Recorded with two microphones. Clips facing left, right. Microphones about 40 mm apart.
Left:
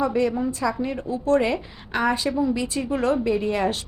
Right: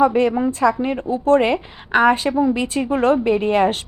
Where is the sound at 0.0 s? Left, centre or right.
Right.